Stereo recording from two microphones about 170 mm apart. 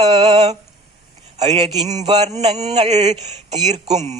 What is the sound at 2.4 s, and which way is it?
Speech, 40° right (ahead or behind).